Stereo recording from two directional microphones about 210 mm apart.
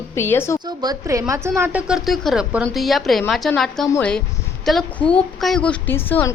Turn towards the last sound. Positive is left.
turn(degrees=10)  # may be behind; listen again after turning